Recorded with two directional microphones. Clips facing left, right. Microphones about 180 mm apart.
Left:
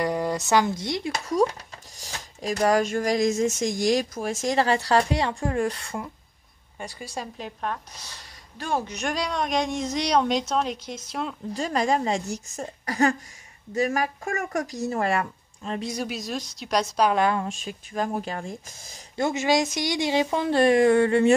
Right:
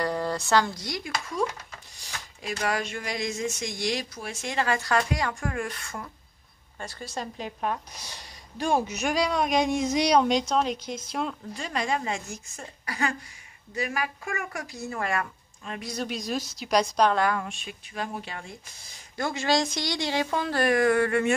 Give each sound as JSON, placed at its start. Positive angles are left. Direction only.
{"t": 0.0, "sound": "a sound", "side_deg": 15}
{"t": 0.8, "sound": "speech", "side_deg": 25}
{"t": 6.8, "sound": "a woman's voice", "side_deg": 15}
{"t": 7.3, "sound": "speech", "side_deg": 0}
{"t": 7.7, "sound": "speech", "side_deg": -15}
{"t": 11.5, "sound": "speech", "side_deg": 40}
{"t": 15.9, "sound": "speech", "side_deg": 5}
{"t": 17.1, "sound": "speech", "side_deg": 20}
{"t": 17.5, "sound": "speech", "side_deg": 40}
{"t": 19.1, "sound": "speech", "side_deg": 20}